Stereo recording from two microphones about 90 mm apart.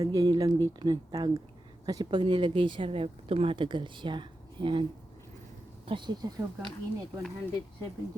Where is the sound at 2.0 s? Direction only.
60° right (ahead or behind).